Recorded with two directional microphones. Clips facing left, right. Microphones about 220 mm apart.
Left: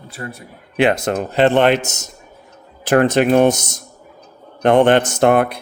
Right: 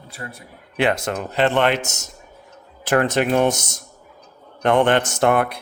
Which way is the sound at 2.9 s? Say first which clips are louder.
Left 5 dB; 20° left (ahead or behind).